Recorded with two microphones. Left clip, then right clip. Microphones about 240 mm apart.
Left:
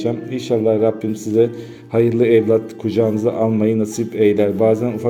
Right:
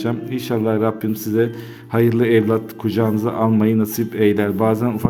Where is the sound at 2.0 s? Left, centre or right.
Centre.